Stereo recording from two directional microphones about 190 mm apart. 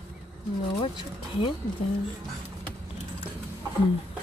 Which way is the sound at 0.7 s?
25° left (ahead or behind).